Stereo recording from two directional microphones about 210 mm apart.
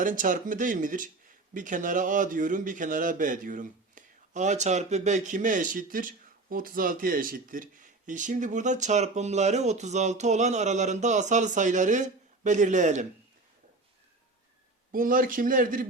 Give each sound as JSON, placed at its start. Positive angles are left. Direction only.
{"t": 0.0, "sound": "a man's voice", "side_deg": -40}
{"t": 14.9, "sound": "a man's voice", "side_deg": -40}